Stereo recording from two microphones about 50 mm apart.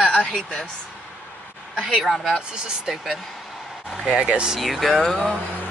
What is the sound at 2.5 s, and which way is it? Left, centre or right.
Speech, centre.